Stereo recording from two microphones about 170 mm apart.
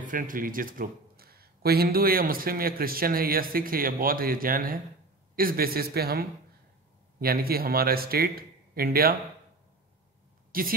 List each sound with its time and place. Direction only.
0.0 s speech: 50° right (ahead or behind)
10.5 s a woman's voice: 55° right (ahead or behind)